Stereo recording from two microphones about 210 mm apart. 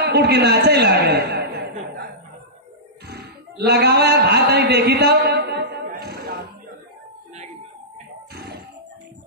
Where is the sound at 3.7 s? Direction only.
50° right (ahead or behind).